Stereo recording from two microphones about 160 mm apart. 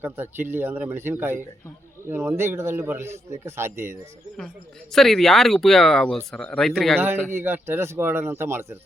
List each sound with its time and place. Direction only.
0.0 s a man's voice: 15° right (ahead or behind)
4.9 s speech: centre (ahead or behind)
7.3 s a man's voice: 15° right (ahead or behind)